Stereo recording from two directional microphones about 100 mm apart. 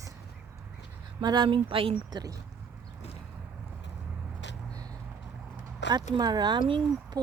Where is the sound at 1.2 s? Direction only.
45° right (ahead or behind); by 1.9 s 65° right (ahead or behind).